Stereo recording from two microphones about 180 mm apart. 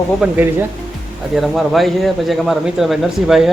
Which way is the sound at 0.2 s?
5° right (ahead or behind).